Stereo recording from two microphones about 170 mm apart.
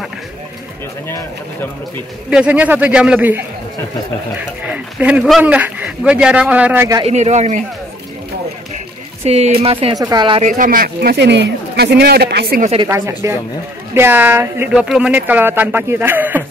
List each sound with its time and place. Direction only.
2.3 s speech: 5° right (ahead or behind)
7.1 s a man's voice: 40° right (ahead or behind)
9.2 s speech: 35° right (ahead or behind)
9.9 s speech: 25° right (ahead or behind)
10.4 s speech: 50° right (ahead or behind); by 12.6 s 65° right (ahead or behind)
12.8 s speech: 15° right (ahead or behind)